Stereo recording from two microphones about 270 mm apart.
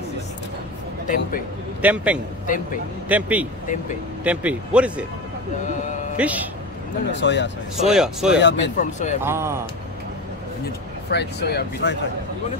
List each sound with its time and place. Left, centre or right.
1.8 s speech: centre
2.4 s speech: left
3.1 s speech: centre
6.1 s speech: centre
7.1 s speech: left
7.8 s speech: centre
8.4 s speech: left
8.7 s speech: left
9.2 s speech: centre
11.1 s speech: left